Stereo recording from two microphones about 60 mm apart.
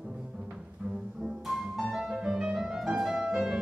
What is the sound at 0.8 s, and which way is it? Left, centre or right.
Music, centre.